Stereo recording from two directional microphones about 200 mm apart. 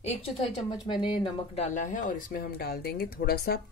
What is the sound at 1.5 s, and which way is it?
Speech, 35° left (ahead or behind).